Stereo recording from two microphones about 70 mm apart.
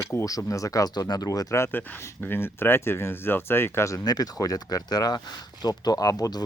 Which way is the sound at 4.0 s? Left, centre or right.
Left.